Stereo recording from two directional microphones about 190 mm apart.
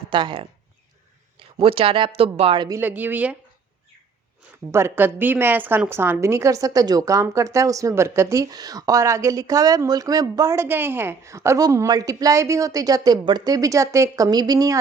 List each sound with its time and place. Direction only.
0.1 s speech: 25° right (ahead or behind); by 3.3 s 10° right (ahead or behind)
4.7 s a woman's voice: 10° right (ahead or behind)